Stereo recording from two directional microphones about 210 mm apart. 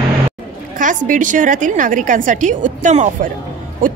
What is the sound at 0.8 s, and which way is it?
A woman's voice, 40° right (ahead or behind).